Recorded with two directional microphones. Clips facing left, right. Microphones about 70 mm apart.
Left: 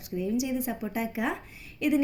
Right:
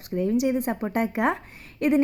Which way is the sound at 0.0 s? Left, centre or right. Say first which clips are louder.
Right 6 dB; right.